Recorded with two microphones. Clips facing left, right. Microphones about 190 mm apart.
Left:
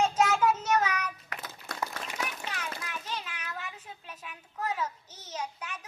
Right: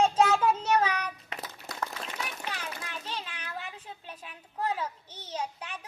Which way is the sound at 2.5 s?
30° right (ahead or behind).